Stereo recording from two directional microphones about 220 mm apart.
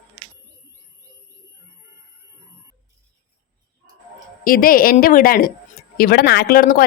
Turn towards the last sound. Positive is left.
turn(degrees=40)  # may be behind; listen again after turning